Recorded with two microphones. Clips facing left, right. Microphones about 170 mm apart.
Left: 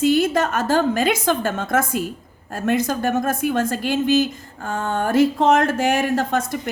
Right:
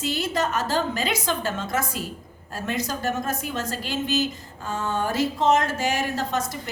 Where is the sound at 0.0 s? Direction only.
50° left (ahead or behind).